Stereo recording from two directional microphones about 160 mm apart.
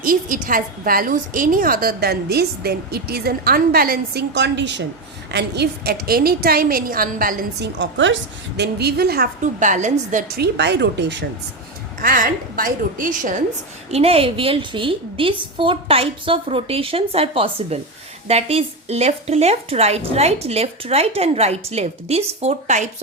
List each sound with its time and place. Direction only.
0.0 s a woman's voice: 60° right (ahead or behind); by 7.9 s 75° right (ahead or behind)
8.5 s a woman's voice: 90° right; by 9.3 s 75° right (ahead or behind)
9.4 s a woman's voice: 50° right (ahead or behind)
10.3 s speech: 85° right
12.0 s a woman's voice: 60° right (ahead or behind)
13.9 s a woman's voice: 40° right (ahead or behind)